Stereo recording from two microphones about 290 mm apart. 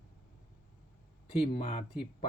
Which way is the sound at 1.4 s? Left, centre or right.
Centre.